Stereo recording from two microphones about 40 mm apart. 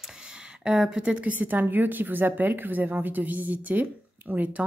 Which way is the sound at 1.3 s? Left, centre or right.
Right.